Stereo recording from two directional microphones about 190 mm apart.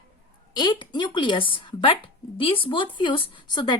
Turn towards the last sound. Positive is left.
turn(degrees=25)  # may be behind; listen again after turning